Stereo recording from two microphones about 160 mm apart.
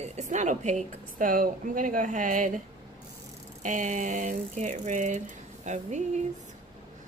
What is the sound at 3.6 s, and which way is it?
Speech, 55° right (ahead or behind).